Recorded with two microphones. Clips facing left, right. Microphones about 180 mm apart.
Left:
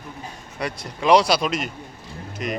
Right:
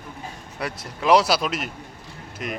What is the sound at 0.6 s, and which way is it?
Speech, 5° right (ahead or behind).